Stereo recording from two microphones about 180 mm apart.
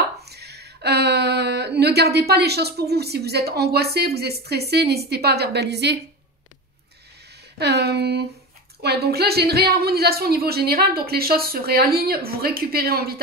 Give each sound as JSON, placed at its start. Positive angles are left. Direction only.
{"t": 0.2, "sound": "speech", "side_deg": -65}
{"t": 7.5, "sound": "a woman's voice", "side_deg": -65}